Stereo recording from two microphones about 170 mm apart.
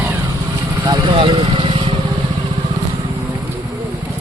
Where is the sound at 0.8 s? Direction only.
25° right (ahead or behind).